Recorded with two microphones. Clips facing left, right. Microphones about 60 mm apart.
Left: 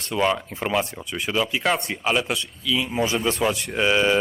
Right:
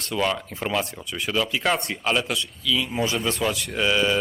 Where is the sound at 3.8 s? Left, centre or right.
Left.